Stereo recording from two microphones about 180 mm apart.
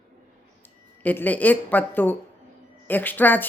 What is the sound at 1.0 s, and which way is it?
Speech, 10° left (ahead or behind).